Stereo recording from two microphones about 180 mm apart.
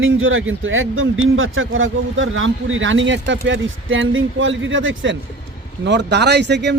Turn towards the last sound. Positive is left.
turn(degrees=-70)  # may be behind; listen again after turning